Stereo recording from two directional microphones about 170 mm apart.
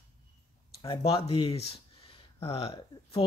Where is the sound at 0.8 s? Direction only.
35° left (ahead or behind).